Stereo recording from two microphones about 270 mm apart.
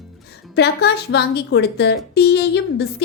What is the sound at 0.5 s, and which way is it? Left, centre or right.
A woman's voice, left.